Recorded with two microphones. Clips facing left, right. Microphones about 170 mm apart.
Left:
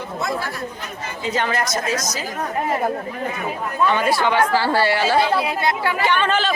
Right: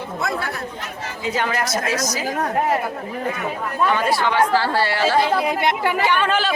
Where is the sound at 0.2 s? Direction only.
65° right (ahead or behind).